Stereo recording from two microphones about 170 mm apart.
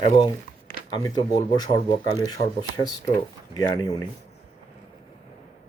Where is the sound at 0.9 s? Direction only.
25° left (ahead or behind).